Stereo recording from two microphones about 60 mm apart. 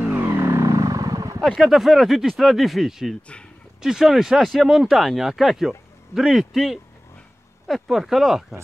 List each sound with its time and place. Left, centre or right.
0.0 s vehicle: right
0.3 s vehicle: right
0.6 s vehicle: right
1.6 s speech: centre
3.2 s speech: centre
3.8 s speech: centre